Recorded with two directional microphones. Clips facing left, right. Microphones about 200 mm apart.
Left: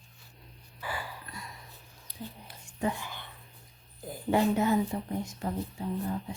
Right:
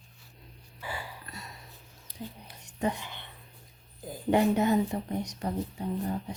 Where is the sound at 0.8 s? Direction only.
25° right (ahead or behind).